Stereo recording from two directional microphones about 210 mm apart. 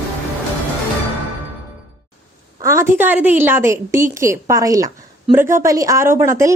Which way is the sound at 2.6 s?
15° right (ahead or behind).